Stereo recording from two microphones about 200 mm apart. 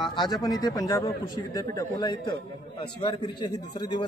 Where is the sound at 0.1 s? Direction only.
20° left (ahead or behind).